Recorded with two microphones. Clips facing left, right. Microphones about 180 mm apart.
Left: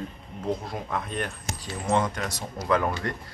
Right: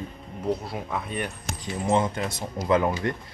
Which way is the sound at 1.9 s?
25° right (ahead or behind).